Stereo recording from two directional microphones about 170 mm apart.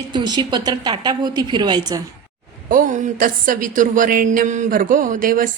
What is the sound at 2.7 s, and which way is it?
Speech, 50° right (ahead or behind).